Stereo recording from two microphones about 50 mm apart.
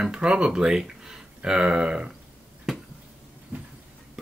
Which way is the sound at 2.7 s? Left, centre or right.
Centre.